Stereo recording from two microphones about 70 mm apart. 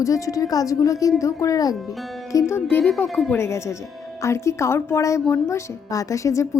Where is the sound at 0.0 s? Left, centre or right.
Left.